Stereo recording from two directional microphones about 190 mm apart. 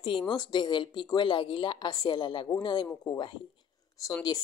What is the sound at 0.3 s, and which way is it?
Speech, 25° left (ahead or behind).